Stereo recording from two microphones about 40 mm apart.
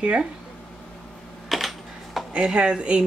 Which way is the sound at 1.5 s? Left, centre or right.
Centre.